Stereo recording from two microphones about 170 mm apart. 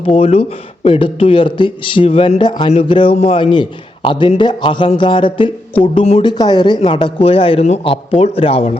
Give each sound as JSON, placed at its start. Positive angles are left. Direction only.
{"t": 0.0, "sound": "a man's voice", "side_deg": 35}